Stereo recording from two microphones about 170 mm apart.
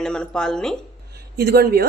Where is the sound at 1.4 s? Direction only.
70° right (ahead or behind).